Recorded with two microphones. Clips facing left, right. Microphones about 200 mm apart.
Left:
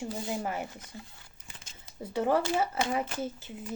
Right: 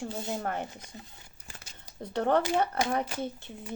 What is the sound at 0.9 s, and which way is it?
Speech, 20° right (ahead or behind).